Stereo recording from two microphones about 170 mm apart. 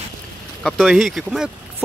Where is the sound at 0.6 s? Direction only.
Centre (ahead or behind).